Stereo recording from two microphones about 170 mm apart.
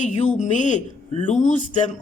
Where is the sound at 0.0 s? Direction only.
45° left (ahead or behind).